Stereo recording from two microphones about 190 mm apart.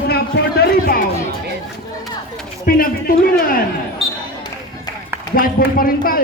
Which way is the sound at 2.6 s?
50° left (ahead or behind).